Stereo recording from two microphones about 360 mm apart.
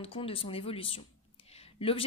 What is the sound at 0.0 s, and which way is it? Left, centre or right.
A woman's voice, centre.